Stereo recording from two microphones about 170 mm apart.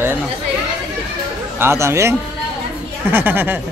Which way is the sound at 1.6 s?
15° right (ahead or behind).